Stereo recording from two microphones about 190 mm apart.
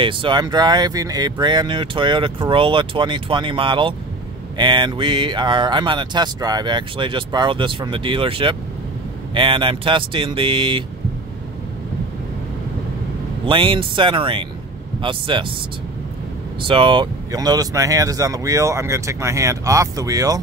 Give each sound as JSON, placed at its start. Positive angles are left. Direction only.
{"t": 0.0, "sound": "speech", "side_deg": -25}
{"t": 13.5, "sound": "speech", "side_deg": -25}
{"t": 16.6, "sound": "speech", "side_deg": -25}